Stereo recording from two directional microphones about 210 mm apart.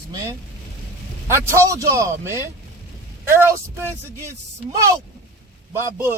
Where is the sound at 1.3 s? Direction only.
15° right (ahead or behind).